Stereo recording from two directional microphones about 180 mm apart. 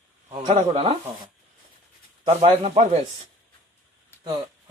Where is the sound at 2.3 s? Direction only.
35° right (ahead or behind).